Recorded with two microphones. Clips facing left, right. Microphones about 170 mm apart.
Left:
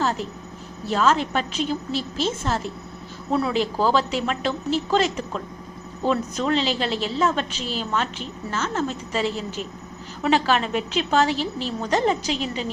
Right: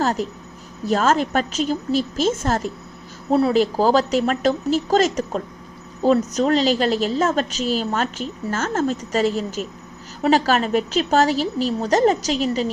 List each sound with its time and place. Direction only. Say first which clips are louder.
0.0 s a woman's voice: right 3 dB; 45° right (ahead or behind)